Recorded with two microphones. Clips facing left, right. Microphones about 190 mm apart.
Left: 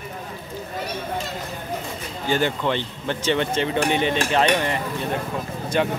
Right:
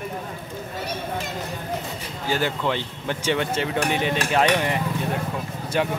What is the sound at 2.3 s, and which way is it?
Speech, 5° right (ahead or behind).